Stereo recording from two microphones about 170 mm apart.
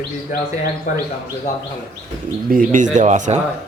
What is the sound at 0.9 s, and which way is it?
Speech, 50° left (ahead or behind).